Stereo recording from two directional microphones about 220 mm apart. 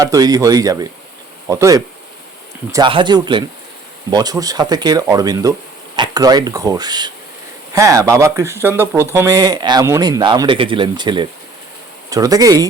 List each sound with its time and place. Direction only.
0.0 s speech: 15° right (ahead or behind)